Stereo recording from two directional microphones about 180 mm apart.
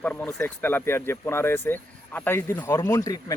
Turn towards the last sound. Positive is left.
turn(degrees=20)  # may be behind; listen again after turning